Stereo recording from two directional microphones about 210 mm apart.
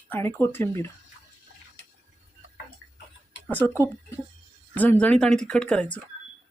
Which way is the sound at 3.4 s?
10° left (ahead or behind).